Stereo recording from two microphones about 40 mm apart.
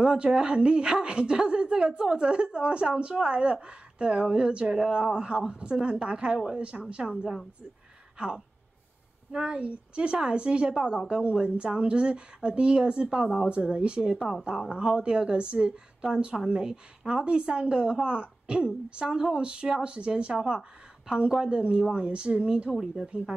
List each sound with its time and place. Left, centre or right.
0.0 s a woman's voice: centre
9.3 s a woman's voice: centre
9.6 s a woman's voice: right
10.7 s speech: centre
11.4 s a woman's voice: right
22.7 s speech: centre